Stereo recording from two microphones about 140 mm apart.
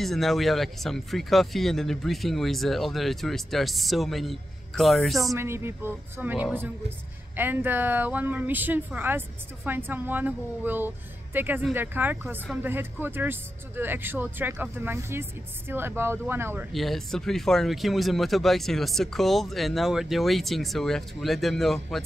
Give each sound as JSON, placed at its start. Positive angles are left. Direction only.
{"t": 0.0, "sound": "speech", "side_deg": 0}
{"t": 5.3, "sound": "speech", "side_deg": -20}
{"t": 16.7, "sound": "speech", "side_deg": 0}